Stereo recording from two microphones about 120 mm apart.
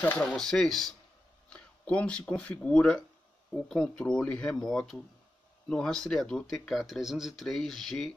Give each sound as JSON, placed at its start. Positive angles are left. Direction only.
{"t": 0.0, "sound": "speech", "side_deg": 10}